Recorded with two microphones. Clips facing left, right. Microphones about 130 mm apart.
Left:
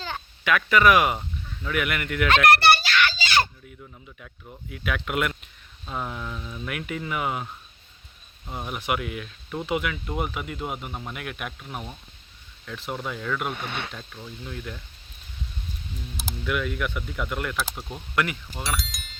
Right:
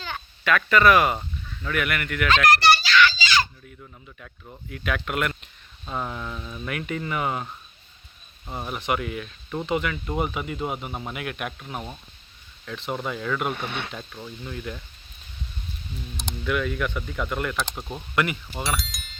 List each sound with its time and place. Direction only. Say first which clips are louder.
0.4 s speech: right 1 dB; 10° left (ahead or behind)
2.3 s a sound: left 1 dB; 60° left (ahead or behind)
4.7 s speech: even; 5° left (ahead or behind)
5.8 s speech: right 1 dB; centre (ahead or behind)
16.1 s speech: right 2 dB; 5° left (ahead or behind)